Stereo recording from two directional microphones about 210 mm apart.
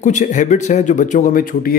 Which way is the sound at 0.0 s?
35° left (ahead or behind).